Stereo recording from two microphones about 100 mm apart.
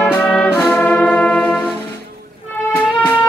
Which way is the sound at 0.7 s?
15° left (ahead or behind).